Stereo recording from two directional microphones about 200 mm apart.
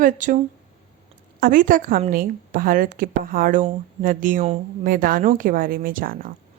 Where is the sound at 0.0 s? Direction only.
40° right (ahead or behind).